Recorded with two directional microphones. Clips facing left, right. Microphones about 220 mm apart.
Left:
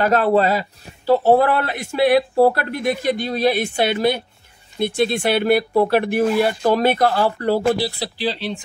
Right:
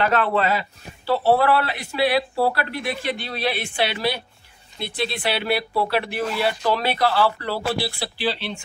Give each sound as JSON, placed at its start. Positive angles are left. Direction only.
{"t": 0.0, "sound": "a man's voice", "side_deg": 40}